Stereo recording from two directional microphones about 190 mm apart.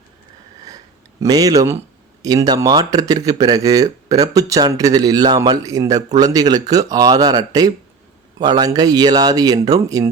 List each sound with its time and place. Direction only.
1.2 s a man's voice: 20° right (ahead or behind)